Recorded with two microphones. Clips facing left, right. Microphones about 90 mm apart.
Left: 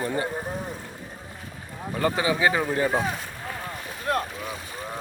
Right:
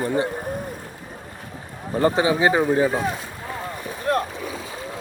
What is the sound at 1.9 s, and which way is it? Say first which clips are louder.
Speech: right 5 dB; 30° right (ahead or behind).